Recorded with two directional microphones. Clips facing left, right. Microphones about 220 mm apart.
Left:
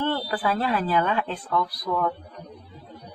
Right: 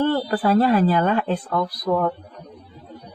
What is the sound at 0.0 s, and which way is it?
A woman's voice, 45° right (ahead or behind).